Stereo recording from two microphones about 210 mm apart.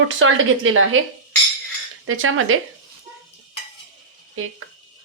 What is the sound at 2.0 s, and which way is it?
Speech, 75° right (ahead or behind).